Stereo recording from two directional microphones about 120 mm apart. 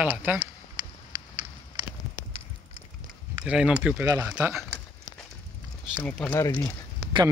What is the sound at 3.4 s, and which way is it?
Speech, 5° right (ahead or behind).